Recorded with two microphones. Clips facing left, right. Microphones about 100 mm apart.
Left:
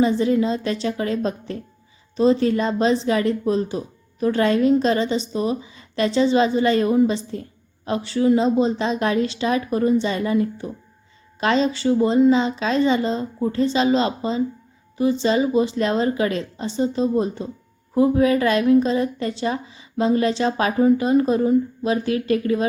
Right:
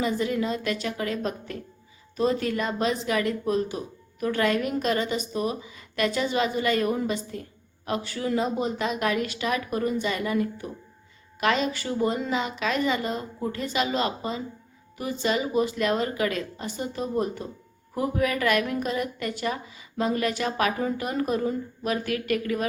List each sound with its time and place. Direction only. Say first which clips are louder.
0.0 s a woman's voice: left 8 dB; 30° left (ahead or behind)